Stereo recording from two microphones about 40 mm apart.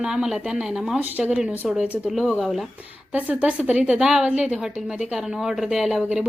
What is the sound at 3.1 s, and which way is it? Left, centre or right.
Speech, right.